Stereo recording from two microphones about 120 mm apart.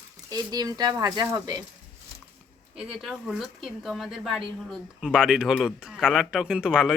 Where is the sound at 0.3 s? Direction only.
35° right (ahead or behind).